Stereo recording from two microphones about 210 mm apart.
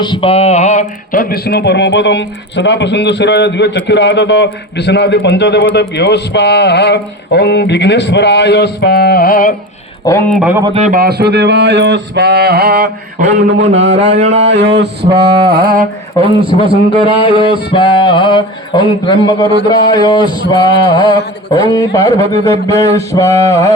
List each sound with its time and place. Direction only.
0.0 s a sound: 25° left (ahead or behind); by 5.6 s 55° left (ahead or behind)
6.0 s speech: 55° left (ahead or behind)
10.0 s speech: 15° left (ahead or behind)
10.3 s speech: 5° right (ahead or behind)
10.8 s mantra: 40° right (ahead or behind)
13.5 s a man's voice: 60° right (ahead or behind)
14.2 s a sound: 35° right (ahead or behind)
14.4 s mantra: 55° right (ahead or behind)
16.1 s a man's voice: 25° right (ahead or behind)
17.7 s a sound: 25° left (ahead or behind)
21.7 s mantra: 15° left (ahead or behind)
22.0 s a man's voice: 30° right (ahead or behind)
22.6 s mantra: 15° left (ahead or behind)